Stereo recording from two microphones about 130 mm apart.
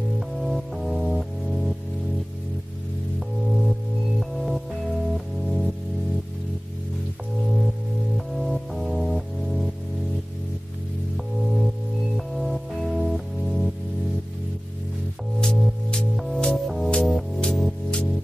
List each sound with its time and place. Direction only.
0.4 s music: centre (ahead or behind)
3.2 s music: centre (ahead or behind)
8.4 s music: centre (ahead or behind)
11.1 s music: centre (ahead or behind)
15.4 s music: 5° left (ahead or behind)